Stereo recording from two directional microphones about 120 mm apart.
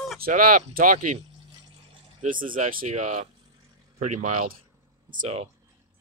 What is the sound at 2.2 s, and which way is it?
Speech, 85° right.